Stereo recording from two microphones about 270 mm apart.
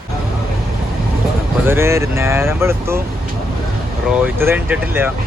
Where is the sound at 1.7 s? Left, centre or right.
Centre.